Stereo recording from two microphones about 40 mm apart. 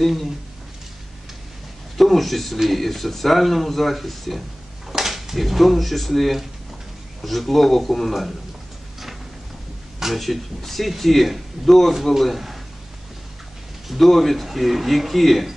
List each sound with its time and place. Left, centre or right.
0.0 s speech: centre
2.0 s speech: centre
9.9 s speech: centre
13.8 s speech: centre